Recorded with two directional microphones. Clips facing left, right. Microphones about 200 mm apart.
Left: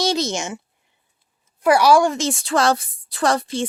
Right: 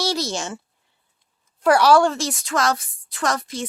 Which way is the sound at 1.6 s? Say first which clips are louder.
Left 1 dB; 10° left (ahead or behind).